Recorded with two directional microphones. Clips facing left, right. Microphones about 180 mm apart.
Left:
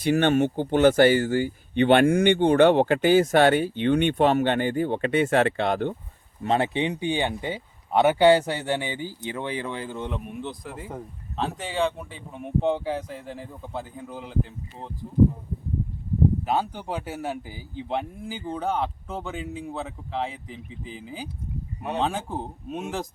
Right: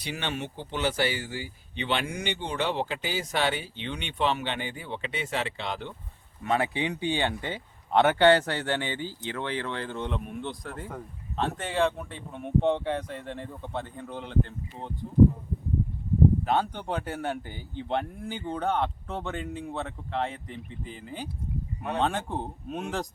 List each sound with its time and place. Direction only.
0.0 s speech: 50° left (ahead or behind)
6.4 s a man's voice: 30° left (ahead or behind); by 14.9 s centre (ahead or behind)
16.4 s a man's voice: 5° left (ahead or behind)